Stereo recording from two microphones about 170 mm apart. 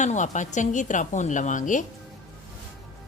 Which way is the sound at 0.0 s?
45° left (ahead or behind).